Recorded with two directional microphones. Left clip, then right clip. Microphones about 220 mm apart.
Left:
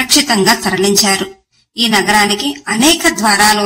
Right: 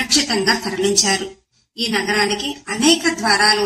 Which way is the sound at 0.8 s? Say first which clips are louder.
Left 3 dB; 45° left (ahead or behind).